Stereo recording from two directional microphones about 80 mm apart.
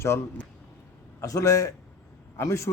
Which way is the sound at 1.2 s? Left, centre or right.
Left.